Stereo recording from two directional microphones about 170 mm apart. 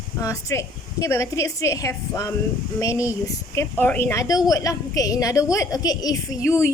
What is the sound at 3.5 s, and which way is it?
A woman's voice, 15° left (ahead or behind).